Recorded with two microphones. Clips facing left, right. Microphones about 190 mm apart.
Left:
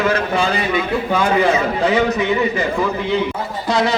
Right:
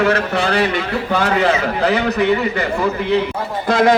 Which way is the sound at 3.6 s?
50° right (ahead or behind).